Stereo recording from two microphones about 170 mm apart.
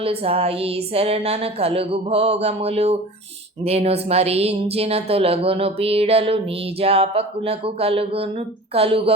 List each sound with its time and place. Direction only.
0.0 s speech: 35° right (ahead or behind)